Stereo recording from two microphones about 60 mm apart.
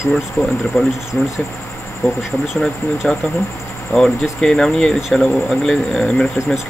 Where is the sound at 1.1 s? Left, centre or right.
Centre.